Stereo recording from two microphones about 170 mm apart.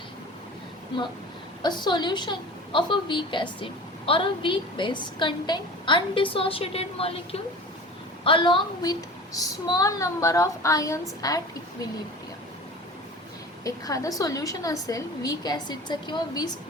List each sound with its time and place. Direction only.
1.6 s a woman's voice: 25° left (ahead or behind)
13.7 s a woman's voice: 20° left (ahead or behind)